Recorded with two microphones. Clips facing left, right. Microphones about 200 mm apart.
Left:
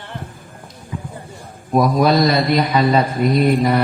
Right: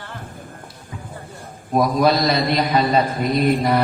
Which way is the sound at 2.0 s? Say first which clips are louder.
Left 2 dB; 50° left (ahead or behind).